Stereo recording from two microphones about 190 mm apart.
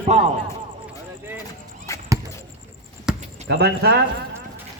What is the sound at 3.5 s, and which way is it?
Speech, 55° right (ahead or behind).